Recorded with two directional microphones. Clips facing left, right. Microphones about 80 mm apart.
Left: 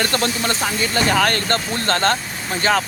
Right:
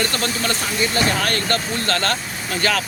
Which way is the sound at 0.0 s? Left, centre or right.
Left.